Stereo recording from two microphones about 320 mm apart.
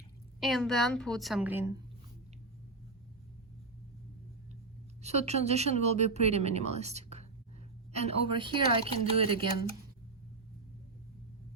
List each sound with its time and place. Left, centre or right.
0.3 s a woman's voice: centre
5.0 s speech: centre